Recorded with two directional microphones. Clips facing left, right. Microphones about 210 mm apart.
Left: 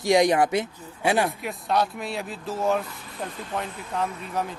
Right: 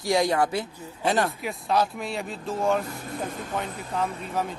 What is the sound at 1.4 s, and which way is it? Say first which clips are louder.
Speech: even; centre (ahead or behind).